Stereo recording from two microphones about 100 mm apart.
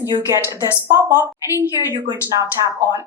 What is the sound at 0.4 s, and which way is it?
Speech, 25° right (ahead or behind).